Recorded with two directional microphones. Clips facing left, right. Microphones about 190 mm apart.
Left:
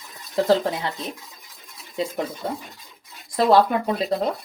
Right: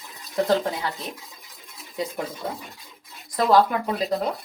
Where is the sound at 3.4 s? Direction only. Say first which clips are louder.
Left 2 dB; 25° left (ahead or behind).